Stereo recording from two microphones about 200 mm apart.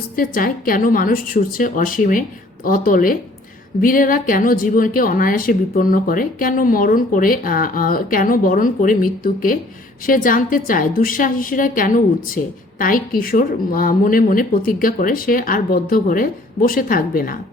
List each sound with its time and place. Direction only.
0.2 s a woman's voice: 45° left (ahead or behind)